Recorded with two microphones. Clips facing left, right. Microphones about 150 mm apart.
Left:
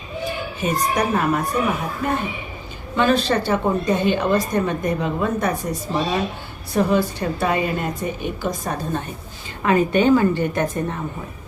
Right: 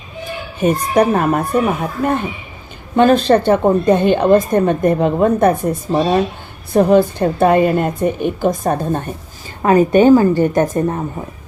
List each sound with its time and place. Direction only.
0.6 s a woman's voice: 55° right (ahead or behind)
2.9 s a woman's voice: 50° right (ahead or behind)